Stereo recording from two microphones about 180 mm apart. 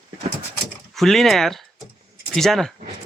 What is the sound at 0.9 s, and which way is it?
Speech, centre (ahead or behind).